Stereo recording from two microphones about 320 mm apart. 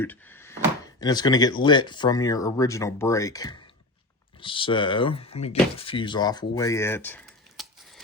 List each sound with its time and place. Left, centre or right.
0.0 s speech: centre